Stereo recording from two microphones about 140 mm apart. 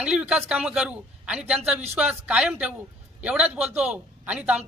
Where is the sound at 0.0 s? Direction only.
5° right (ahead or behind).